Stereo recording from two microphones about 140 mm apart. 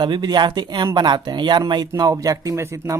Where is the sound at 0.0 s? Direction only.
30° right (ahead or behind).